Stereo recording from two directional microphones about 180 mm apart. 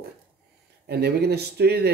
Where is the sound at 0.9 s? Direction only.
65° right (ahead or behind).